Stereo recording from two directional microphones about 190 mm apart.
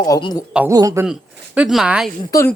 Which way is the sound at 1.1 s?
5° right (ahead or behind).